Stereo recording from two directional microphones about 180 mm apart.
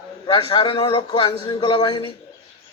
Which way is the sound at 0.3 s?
30° left (ahead or behind).